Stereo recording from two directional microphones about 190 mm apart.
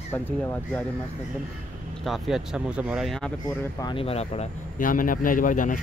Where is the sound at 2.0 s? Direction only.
Centre (ahead or behind).